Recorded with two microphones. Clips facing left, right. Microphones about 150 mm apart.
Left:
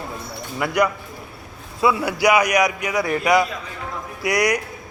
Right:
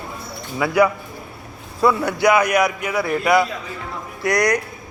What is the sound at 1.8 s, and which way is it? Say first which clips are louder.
A man's voice: right 2 dB; 5° left (ahead or behind).